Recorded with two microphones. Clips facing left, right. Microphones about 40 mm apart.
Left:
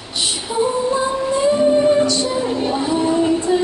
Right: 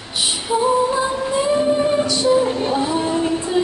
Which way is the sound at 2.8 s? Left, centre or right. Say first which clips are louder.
Left 2 dB; right.